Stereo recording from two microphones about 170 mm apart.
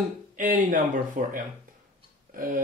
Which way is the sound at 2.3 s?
55° right (ahead or behind).